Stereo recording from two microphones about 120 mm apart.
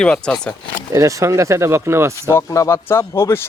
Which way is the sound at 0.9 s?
25° right (ahead or behind).